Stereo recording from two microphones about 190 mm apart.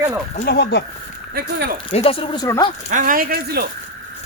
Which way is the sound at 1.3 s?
55° right (ahead or behind).